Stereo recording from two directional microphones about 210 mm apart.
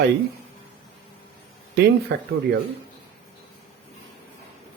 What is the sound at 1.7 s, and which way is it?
Speech, 50° right (ahead or behind).